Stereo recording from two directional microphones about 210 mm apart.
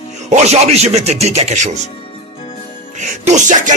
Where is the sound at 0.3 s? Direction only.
30° right (ahead or behind).